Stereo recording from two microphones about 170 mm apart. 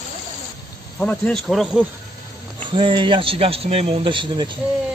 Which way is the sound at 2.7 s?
30° right (ahead or behind).